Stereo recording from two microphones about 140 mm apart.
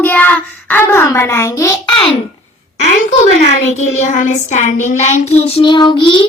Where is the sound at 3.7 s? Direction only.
55° left (ahead or behind).